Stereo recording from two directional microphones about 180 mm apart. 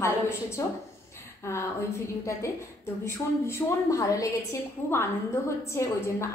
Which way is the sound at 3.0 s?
15° left (ahead or behind).